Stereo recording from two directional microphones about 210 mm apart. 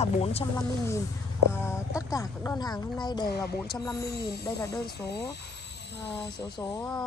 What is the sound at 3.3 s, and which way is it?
Speech, 50° left (ahead or behind).